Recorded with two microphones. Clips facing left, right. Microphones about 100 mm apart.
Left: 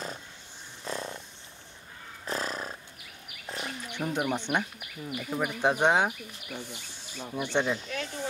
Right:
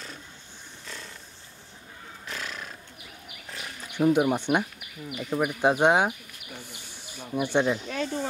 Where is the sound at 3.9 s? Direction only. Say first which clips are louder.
Right 9 dB; 10° right (ahead or behind).